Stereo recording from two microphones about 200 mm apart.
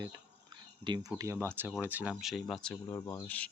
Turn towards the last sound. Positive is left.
turn(degrees=10)  # may be behind; listen again after turning